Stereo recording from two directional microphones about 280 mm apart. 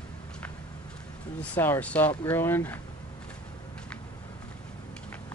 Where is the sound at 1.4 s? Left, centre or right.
Centre.